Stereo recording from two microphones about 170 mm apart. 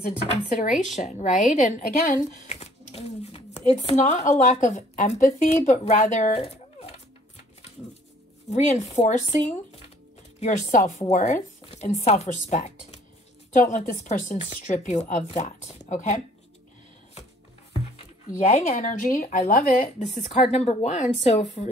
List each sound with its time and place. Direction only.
0.2 s a woman's voice: 45° left (ahead or behind)
8.5 s a woman's voice: 45° left (ahead or behind)
18.5 s a woman's voice: 50° left (ahead or behind)